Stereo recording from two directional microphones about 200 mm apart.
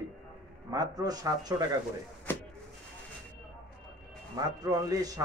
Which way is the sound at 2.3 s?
10° left (ahead or behind).